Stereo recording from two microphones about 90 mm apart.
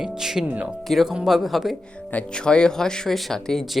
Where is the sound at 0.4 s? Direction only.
15° right (ahead or behind).